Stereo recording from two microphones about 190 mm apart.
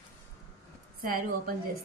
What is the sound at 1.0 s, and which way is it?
Speech, 50° right (ahead or behind).